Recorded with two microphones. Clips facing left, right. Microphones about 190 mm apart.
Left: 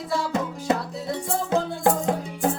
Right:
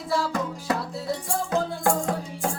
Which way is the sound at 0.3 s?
20° left (ahead or behind).